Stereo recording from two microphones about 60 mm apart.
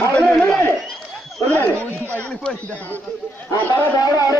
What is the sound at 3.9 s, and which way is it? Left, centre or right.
Speech, left.